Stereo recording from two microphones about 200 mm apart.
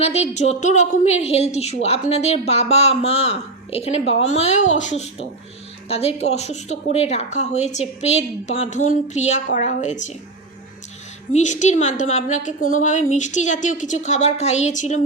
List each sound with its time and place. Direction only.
0.0 s speech: 35° left (ahead or behind)
11.3 s speech: 35° left (ahead or behind)